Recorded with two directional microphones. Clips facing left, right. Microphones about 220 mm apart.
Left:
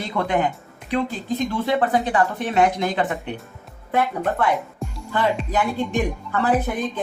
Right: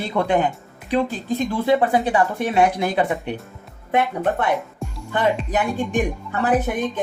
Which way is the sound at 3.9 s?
20° right (ahead or behind).